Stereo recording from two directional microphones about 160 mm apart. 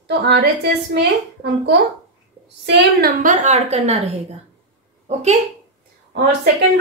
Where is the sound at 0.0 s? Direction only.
90° right; by 5.4 s 45° right (ahead or behind).